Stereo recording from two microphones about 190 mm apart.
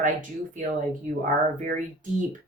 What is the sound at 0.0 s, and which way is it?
Speech, 45° right (ahead or behind).